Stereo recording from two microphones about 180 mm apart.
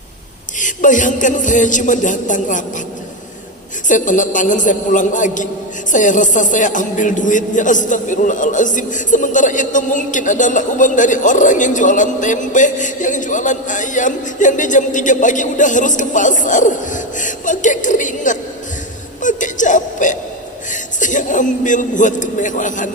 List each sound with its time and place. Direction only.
0.6 s a man's voice: 45° left (ahead or behind)
3.8 s a man's voice: 45° left (ahead or behind)
19.2 s a sound: 45° left (ahead or behind)
21.0 s a man's voice: 45° left (ahead or behind)